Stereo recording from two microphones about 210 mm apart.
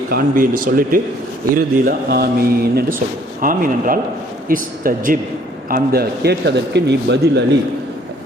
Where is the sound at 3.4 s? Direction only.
40° right (ahead or behind).